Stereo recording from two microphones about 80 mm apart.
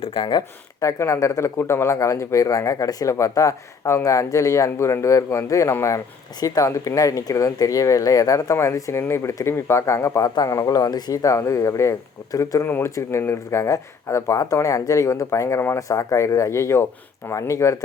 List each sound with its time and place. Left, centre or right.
0.1 s speech: left
0.8 s speech: left
10.2 s speech: left
12.6 s speech: left